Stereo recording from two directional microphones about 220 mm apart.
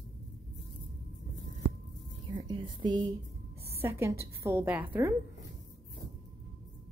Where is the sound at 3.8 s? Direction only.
10° right (ahead or behind).